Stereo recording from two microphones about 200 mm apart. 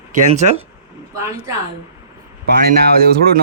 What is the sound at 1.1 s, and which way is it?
Speech, 15° right (ahead or behind).